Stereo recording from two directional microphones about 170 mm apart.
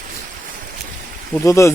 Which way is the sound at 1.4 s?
15° left (ahead or behind).